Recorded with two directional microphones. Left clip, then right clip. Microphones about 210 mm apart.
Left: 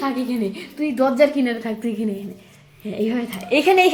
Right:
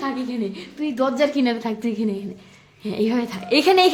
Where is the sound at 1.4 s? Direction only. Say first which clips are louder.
Even; 15° right (ahead or behind).